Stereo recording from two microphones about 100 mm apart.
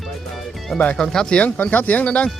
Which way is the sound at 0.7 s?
10° left (ahead or behind).